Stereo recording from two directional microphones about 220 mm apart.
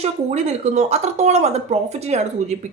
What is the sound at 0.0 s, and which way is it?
A woman's voice, 30° right (ahead or behind).